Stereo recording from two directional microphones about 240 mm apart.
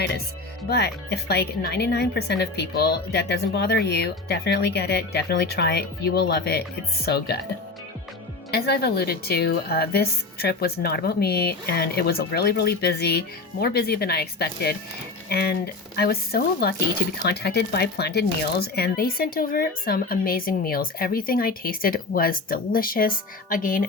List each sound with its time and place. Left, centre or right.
0.7 s speech: left
8.4 s speech: left